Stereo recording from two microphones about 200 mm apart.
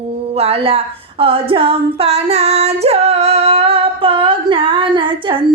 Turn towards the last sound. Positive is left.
turn(degrees=-25)  # may be behind; listen again after turning